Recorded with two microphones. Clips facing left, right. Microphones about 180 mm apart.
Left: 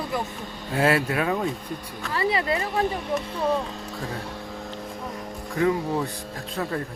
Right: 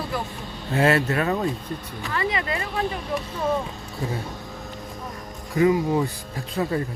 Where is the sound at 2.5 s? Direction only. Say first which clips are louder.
Left 2 dB; 20° left (ahead or behind).